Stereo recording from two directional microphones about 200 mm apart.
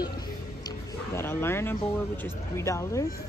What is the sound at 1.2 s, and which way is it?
Speech, 10° left (ahead or behind).